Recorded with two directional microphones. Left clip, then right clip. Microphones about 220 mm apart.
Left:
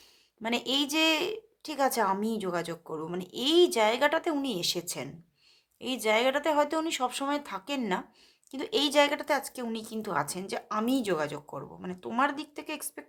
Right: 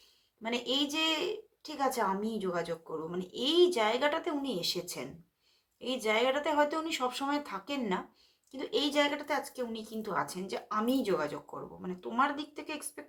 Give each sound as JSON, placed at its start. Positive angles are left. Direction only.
{"t": 0.4, "sound": "a woman's voice", "side_deg": 45}